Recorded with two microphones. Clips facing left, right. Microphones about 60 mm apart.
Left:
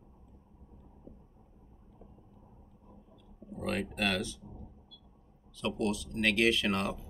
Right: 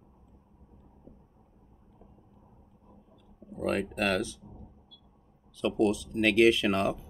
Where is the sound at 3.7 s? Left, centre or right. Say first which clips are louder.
Right 4 dB; centre.